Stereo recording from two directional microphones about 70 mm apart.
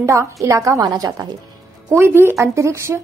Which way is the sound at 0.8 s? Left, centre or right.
Right.